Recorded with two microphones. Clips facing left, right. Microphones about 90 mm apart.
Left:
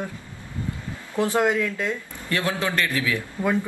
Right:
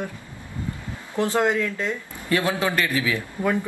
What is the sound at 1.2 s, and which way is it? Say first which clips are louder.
Speech: even; 15° left (ahead or behind).